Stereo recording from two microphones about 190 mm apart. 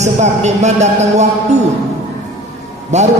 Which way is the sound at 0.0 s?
35° right (ahead or behind).